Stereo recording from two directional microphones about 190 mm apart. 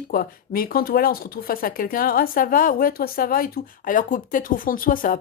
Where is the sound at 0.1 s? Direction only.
50° left (ahead or behind).